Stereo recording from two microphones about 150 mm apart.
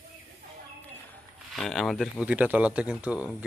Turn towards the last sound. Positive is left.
turn(degrees=-10)  # may be behind; listen again after turning